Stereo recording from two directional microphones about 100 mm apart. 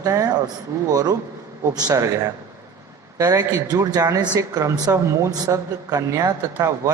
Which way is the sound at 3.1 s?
35° right (ahead or behind).